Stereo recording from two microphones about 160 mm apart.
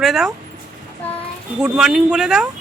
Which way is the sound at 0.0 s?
Centre (ahead or behind).